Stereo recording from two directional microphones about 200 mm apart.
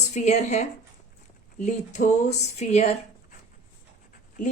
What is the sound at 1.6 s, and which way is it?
Speech, 35° left (ahead or behind).